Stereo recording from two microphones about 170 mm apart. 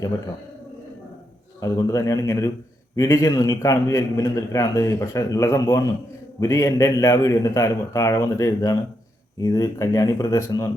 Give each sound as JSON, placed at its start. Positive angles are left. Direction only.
{"t": 1.6, "sound": "a man's voice", "side_deg": 20}